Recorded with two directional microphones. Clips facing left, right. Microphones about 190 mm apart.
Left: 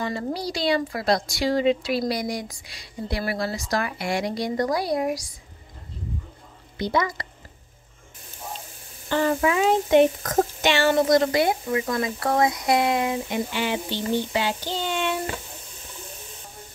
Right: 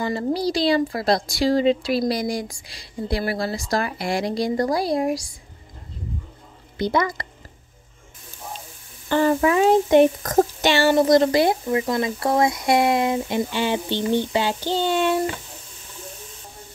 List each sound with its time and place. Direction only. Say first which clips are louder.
0.5 s speech: right 3 dB; 35° right (ahead or behind)
6.8 s speech: right 3 dB; 55° right (ahead or behind)
9.1 s speech: right 3 dB; 40° right (ahead or behind)